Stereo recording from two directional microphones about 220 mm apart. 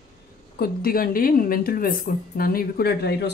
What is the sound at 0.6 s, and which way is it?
Speech, 40° left (ahead or behind).